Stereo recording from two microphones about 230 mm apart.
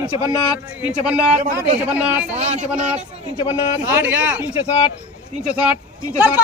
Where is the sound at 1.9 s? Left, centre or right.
Centre.